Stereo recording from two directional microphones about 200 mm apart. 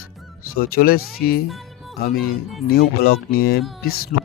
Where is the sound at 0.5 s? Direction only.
50° left (ahead or behind).